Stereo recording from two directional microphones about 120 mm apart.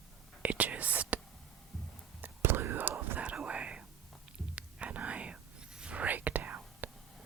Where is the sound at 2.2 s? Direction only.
20° right (ahead or behind).